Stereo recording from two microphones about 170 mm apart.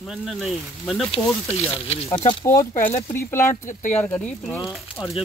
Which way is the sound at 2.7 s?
45° left (ahead or behind).